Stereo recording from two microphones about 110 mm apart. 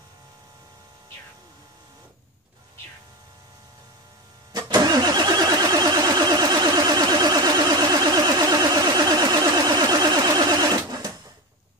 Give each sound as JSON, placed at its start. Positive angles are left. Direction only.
{"t": 4.5, "sound": "vehicle", "side_deg": -40}